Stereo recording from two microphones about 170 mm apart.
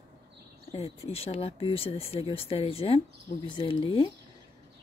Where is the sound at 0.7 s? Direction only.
35° left (ahead or behind).